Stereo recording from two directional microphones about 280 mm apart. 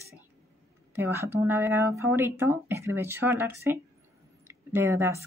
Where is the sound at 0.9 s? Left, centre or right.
Centre.